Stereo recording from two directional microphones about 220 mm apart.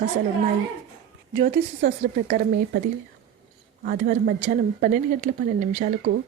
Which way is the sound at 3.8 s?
40° right (ahead or behind).